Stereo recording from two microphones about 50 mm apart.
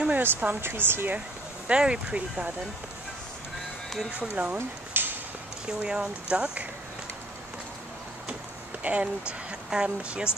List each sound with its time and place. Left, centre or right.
0.2 s speech: right
1.7 s speech: centre
4.1 s speech: right
4.9 s a sound: right
5.8 s speech: right
8.8 s speech: right